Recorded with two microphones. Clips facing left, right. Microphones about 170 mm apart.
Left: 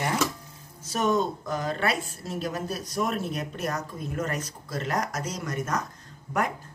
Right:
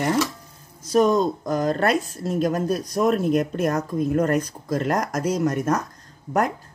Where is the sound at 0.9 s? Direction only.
40° right (ahead or behind).